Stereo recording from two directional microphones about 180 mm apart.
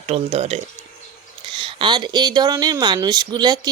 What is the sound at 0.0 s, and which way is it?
Speech, 35° right (ahead or behind).